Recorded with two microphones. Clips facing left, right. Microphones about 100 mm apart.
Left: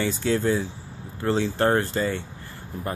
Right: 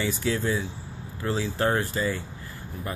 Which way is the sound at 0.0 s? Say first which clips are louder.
Left 3 dB; 35° left (ahead or behind).